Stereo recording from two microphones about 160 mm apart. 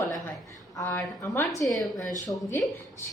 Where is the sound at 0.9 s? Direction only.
5° left (ahead or behind).